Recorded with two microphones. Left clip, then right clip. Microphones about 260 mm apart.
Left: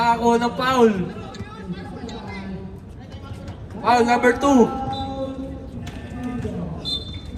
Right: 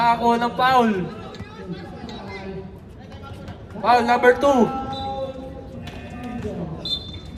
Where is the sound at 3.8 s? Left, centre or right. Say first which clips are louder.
Right 1 dB; right.